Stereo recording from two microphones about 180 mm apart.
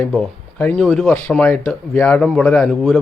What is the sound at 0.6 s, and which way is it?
A man's voice, 5° left (ahead or behind).